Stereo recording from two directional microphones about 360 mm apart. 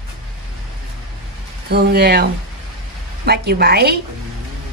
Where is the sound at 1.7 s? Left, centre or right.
Right.